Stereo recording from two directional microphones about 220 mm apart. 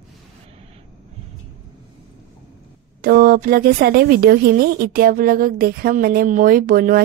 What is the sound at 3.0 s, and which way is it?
Speech, 45° right (ahead or behind).